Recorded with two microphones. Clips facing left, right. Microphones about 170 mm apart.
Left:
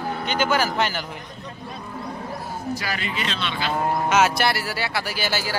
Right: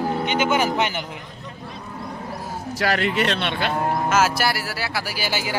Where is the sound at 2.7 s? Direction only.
65° right (ahead or behind).